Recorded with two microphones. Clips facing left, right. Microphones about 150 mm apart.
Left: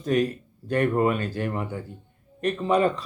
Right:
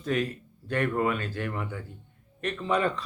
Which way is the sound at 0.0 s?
40° left (ahead or behind).